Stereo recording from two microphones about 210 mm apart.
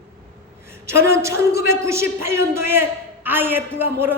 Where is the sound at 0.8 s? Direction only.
10° right (ahead or behind).